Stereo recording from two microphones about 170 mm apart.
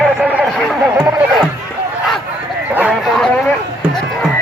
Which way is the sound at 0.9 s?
20° right (ahead or behind).